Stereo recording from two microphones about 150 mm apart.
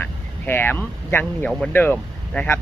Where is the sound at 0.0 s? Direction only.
15° left (ahead or behind).